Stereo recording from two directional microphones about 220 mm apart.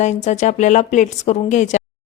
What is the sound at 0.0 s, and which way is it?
Speech, 30° left (ahead or behind).